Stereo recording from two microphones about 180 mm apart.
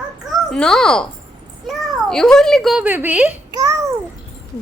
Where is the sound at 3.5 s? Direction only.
25° right (ahead or behind).